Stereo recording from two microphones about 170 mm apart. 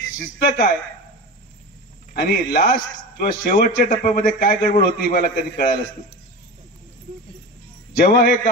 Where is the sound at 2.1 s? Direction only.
60° left (ahead or behind).